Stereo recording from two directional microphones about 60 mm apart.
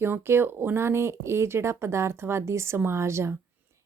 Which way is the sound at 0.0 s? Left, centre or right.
Right.